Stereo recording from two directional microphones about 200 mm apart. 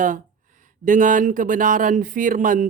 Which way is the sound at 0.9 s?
40° right (ahead or behind).